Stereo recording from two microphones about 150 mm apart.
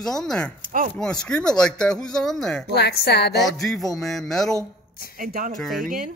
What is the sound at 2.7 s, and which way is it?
Speech, 90° left.